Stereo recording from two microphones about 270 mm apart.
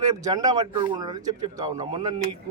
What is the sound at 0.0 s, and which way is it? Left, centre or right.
Speech, centre.